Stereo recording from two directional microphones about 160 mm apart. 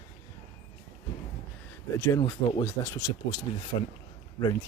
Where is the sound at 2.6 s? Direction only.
15° left (ahead or behind).